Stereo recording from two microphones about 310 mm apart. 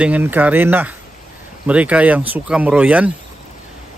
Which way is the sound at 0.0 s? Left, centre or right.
Centre.